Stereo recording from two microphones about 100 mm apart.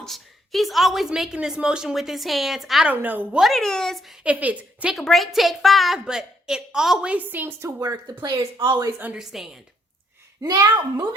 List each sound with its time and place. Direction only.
0.0 s a woman's voice: centre (ahead or behind)
2.8 s a woman's voice: 15° right (ahead or behind)
3.4 s a woman's voice: 5° left (ahead or behind)
4.2 s a woman's voice: 15° right (ahead or behind)
4.9 s a woman's voice: centre (ahead or behind); by 7.7 s 20° right (ahead or behind)
8.5 s speech: 60° right (ahead or behind)
9.1 s a woman's voice: 5° right (ahead or behind)
10.4 s a child's voice: 40° right (ahead or behind)